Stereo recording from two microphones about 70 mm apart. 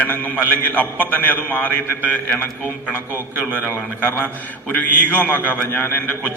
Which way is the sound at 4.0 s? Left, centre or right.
Left.